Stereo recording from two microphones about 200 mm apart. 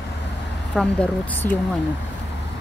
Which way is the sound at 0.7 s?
5° left (ahead or behind).